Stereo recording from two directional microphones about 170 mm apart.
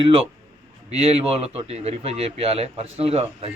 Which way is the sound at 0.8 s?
35° right (ahead or behind).